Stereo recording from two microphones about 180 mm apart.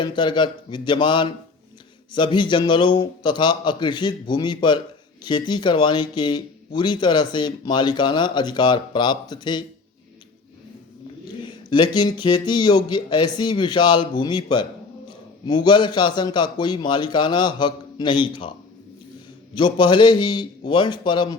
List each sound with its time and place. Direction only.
0.0 s speech: 25° left (ahead or behind)
11.4 s speech: 25° left (ahead or behind)
19.5 s speech: 25° left (ahead or behind)